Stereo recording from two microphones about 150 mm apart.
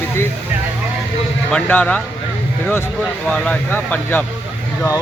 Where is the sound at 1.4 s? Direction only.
10° left (ahead or behind).